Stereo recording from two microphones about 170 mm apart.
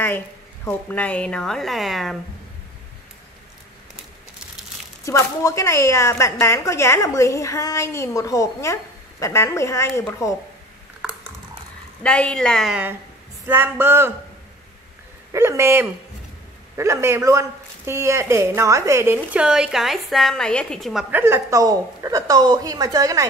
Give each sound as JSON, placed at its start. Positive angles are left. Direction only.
{"t": 0.7, "sound": "a woman's voice", "side_deg": 10}
{"t": 5.0, "sound": "a woman's voice", "side_deg": 15}
{"t": 12.0, "sound": "a woman's voice", "side_deg": 5}
{"t": 13.5, "sound": "speech", "side_deg": -15}
{"t": 15.3, "sound": "speech", "side_deg": -15}
{"t": 21.1, "sound": "a woman's voice", "side_deg": -15}